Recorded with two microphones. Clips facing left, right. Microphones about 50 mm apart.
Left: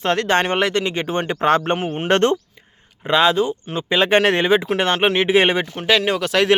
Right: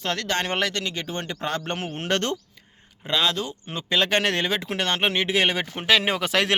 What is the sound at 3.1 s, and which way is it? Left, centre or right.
Speech, left.